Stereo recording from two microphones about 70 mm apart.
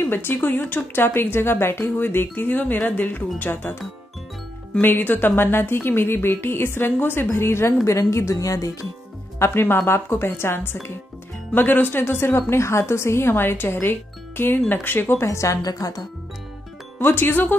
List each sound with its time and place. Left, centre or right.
0.0 s speech: left
4.8 s speech: left
9.4 s speech: left
15.2 s a woman's voice: left
17.0 s speech: left